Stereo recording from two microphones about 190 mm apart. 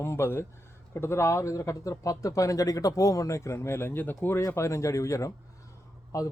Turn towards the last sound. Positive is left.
turn(degrees=20)  # may be behind; listen again after turning